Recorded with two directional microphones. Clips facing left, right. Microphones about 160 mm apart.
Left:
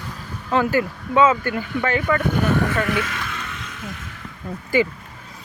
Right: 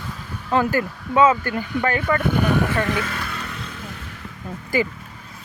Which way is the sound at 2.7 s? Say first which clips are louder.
Even; 30° right (ahead or behind).